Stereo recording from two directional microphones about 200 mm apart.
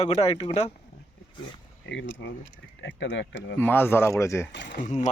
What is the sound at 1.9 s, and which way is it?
Speech, 65° left (ahead or behind).